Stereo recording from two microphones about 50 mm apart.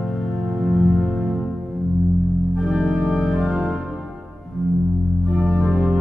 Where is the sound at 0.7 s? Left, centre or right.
Centre.